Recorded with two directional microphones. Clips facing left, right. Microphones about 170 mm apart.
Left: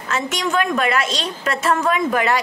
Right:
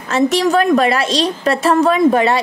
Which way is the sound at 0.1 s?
35° right (ahead or behind).